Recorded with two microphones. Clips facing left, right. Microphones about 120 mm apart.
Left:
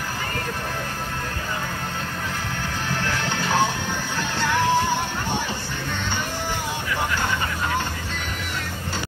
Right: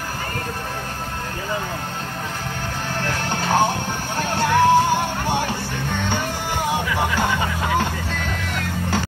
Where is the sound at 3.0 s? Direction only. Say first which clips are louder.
Right 3 dB; 45° right (ahead or behind).